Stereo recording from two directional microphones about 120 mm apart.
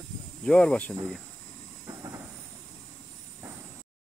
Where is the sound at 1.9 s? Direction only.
30° right (ahead or behind).